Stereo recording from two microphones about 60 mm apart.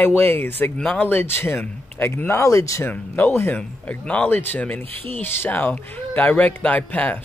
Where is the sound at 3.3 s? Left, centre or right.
Left.